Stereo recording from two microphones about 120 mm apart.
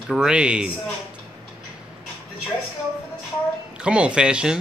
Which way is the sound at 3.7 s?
10° right (ahead or behind).